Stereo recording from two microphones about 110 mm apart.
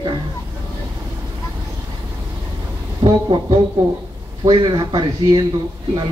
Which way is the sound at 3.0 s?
40° right (ahead or behind).